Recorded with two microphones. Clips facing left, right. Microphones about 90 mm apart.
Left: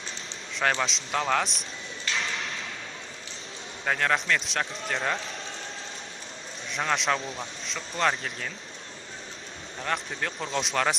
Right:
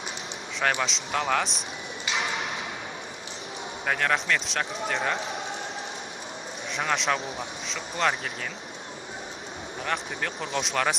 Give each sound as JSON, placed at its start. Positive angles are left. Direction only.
{"t": 0.6, "sound": "a man's voice", "side_deg": -5}
{"t": 2.0, "sound": "a sound", "side_deg": -15}
{"t": 3.8, "sound": "a man's voice", "side_deg": 0}
{"t": 6.7, "sound": "a man's voice", "side_deg": 0}
{"t": 9.8, "sound": "a man's voice", "side_deg": 0}